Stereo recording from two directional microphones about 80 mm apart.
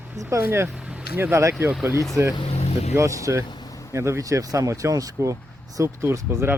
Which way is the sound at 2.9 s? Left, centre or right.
Right.